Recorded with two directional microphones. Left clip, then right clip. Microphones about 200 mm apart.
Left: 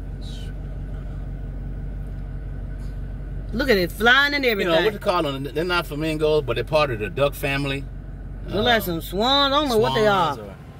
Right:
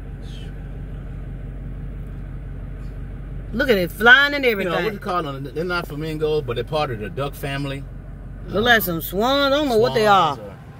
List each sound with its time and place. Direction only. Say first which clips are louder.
3.5 s speech: right 1 dB; centre (ahead or behind)
5.0 s speech: left 2 dB; 40° left (ahead or behind)
8.6 s speech: right 4 dB; 10° right (ahead or behind)